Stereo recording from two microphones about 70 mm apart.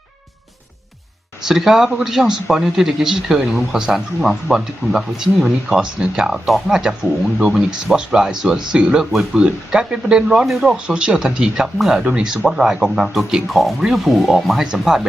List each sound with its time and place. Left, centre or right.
1.5 s speech: centre